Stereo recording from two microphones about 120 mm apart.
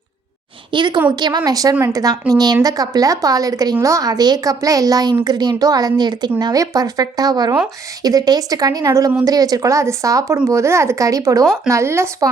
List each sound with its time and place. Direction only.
0.7 s a woman's voice: 40° right (ahead or behind); by 12.3 s 20° right (ahead or behind)